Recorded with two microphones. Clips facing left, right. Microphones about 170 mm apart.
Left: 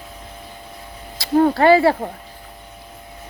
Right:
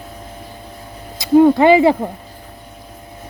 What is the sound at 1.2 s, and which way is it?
Speech, 15° right (ahead or behind).